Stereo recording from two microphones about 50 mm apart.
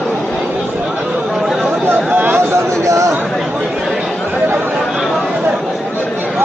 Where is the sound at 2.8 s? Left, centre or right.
Right.